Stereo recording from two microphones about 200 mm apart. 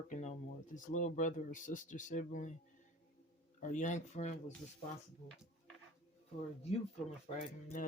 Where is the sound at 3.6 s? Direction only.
40° left (ahead or behind).